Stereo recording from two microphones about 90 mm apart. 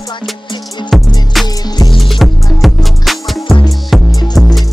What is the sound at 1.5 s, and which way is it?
Music, 50° left (ahead or behind).